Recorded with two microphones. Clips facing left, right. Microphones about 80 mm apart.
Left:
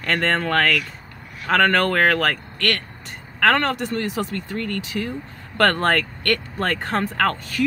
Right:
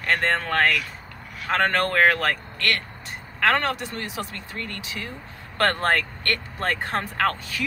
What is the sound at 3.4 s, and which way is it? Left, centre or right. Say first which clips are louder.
Speech: left 3 dB; left.